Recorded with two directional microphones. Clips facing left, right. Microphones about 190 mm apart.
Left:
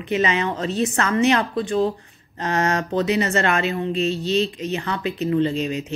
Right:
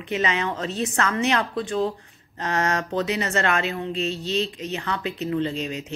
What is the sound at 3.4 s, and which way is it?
A woman's voice, 5° left (ahead or behind).